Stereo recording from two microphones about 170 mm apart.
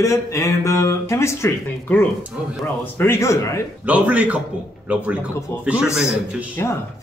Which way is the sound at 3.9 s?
10° right (ahead or behind).